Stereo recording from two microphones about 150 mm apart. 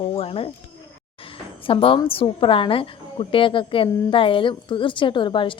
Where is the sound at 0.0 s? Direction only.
40° left (ahead or behind).